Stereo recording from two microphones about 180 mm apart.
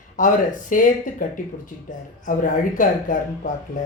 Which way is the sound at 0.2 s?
45° left (ahead or behind).